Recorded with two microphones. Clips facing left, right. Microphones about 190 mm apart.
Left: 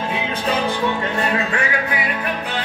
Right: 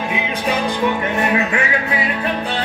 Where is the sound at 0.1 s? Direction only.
10° right (ahead or behind).